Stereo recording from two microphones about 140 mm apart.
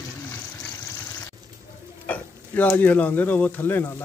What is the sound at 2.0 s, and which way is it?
Speech, 10° left (ahead or behind).